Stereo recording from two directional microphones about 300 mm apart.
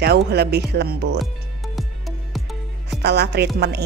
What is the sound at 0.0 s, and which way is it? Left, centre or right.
Speech, right.